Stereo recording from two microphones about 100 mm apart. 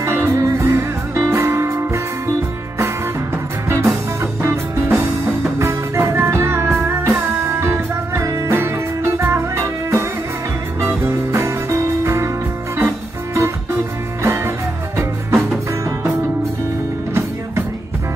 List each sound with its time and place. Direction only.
0.0 s music: 30° right (ahead or behind)
3.6 s music: 30° right (ahead or behind)